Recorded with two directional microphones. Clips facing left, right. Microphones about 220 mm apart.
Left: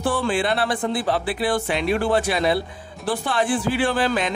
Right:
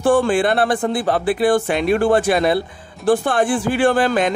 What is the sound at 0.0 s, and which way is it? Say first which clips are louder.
Speech: right 7 dB; 50° right (ahead or behind).